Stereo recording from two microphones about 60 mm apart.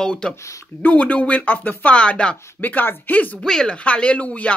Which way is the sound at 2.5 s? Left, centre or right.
Left.